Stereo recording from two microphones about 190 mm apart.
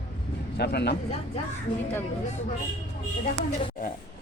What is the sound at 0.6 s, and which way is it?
Speech, 60° left (ahead or behind).